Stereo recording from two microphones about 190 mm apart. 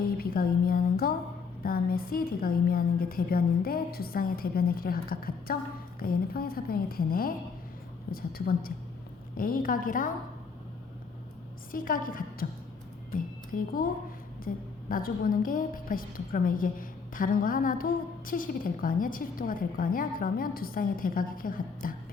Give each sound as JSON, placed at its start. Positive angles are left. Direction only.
{"t": 0.0, "sound": "a woman's voice", "side_deg": 50}
{"t": 11.7, "sound": "a woman's voice", "side_deg": 45}